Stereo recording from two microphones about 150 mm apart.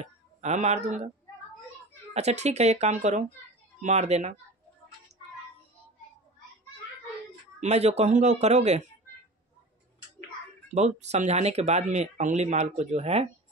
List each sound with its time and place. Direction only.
0.0 s speech: 50° right (ahead or behind)
2.1 s speech: 45° right (ahead or behind)
7.6 s speech: 45° right (ahead or behind)
10.7 s speech: 50° right (ahead or behind)